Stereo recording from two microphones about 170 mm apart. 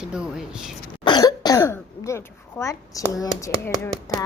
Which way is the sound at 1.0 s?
25° left (ahead or behind).